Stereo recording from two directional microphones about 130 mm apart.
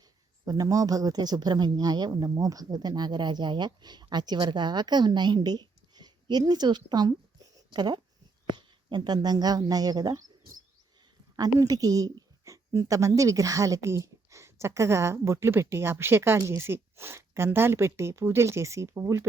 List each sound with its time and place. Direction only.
0.4 s speech: 30° right (ahead or behind)
11.3 s a woman's voice: 30° right (ahead or behind)